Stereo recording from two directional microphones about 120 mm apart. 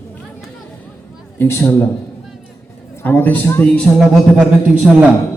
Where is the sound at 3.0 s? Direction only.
15° left (ahead or behind).